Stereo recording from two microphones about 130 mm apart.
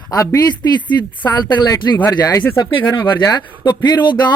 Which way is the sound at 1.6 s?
30° left (ahead or behind).